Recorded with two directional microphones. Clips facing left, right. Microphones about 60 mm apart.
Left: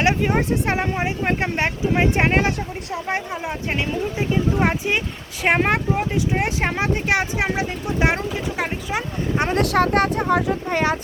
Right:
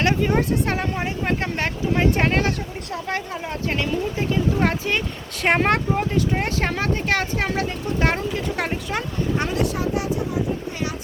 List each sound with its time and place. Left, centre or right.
0.0 s speech: centre
9.6 s speech: left